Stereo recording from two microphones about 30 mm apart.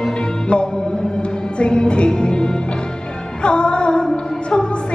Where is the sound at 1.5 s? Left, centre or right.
Left.